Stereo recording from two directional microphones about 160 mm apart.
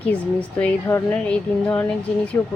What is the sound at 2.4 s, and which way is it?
Speech, 15° left (ahead or behind).